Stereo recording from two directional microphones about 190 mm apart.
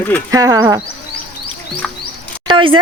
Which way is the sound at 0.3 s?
20° right (ahead or behind).